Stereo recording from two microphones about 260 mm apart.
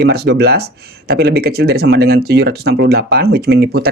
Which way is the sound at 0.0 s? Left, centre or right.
Right.